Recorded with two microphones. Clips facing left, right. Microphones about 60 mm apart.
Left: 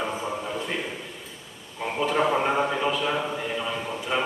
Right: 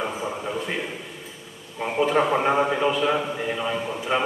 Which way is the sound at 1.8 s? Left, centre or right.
Centre.